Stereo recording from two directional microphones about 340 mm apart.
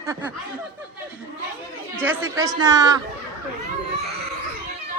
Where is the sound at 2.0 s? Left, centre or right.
Centre.